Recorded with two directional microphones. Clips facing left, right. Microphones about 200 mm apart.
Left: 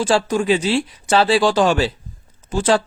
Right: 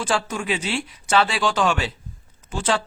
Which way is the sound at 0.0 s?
35° left (ahead or behind).